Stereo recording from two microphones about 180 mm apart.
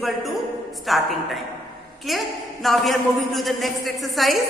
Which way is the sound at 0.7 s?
Centre (ahead or behind).